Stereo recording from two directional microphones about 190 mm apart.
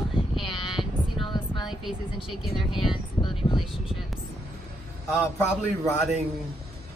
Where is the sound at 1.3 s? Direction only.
25° left (ahead or behind).